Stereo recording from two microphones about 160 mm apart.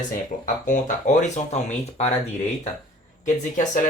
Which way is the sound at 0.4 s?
50° left (ahead or behind).